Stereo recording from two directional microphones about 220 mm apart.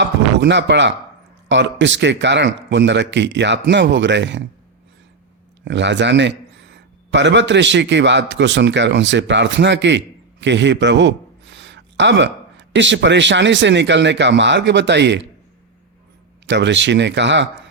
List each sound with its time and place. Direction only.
0.0 s a sound: 55° right (ahead or behind)
1.5 s a man's voice: 55° right (ahead or behind)
5.6 s a man's voice: 55° right (ahead or behind)
16.5 s a man's voice: 55° right (ahead or behind)